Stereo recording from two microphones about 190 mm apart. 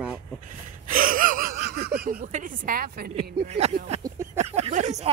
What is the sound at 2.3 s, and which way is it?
Speech, 45° right (ahead or behind).